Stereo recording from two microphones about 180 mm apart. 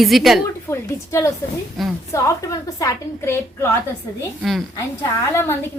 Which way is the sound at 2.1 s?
20° left (ahead or behind).